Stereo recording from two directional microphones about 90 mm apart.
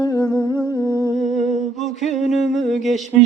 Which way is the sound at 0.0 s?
45° left (ahead or behind).